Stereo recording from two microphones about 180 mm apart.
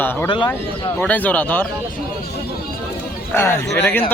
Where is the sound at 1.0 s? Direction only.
10° left (ahead or behind).